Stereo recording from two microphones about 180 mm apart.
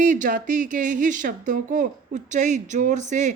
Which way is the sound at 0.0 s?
45° right (ahead or behind).